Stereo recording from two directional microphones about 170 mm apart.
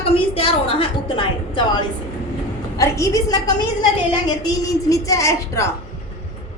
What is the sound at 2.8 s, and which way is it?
Speech, 20° left (ahead or behind).